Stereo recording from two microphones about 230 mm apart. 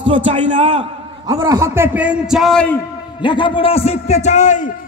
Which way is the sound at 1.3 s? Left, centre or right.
Centre.